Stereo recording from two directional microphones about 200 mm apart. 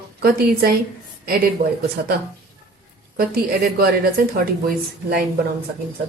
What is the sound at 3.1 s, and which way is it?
Speech, 50° right (ahead or behind).